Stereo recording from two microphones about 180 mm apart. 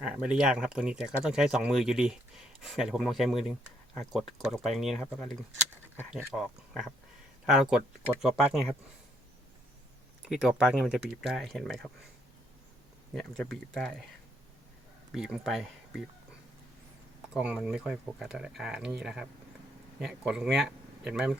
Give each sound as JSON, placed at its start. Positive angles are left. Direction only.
{"t": 0.0, "sound": "speech", "side_deg": -5}
{"t": 10.2, "sound": "speech", "side_deg": -5}
{"t": 13.1, "sound": "speech", "side_deg": 5}
{"t": 15.1, "sound": "speech", "side_deg": 0}
{"t": 17.3, "sound": "speech", "side_deg": -5}